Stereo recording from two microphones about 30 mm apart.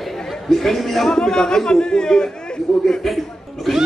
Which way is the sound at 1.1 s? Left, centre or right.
Left.